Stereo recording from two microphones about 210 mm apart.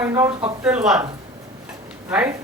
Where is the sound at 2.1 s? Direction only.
10° right (ahead or behind).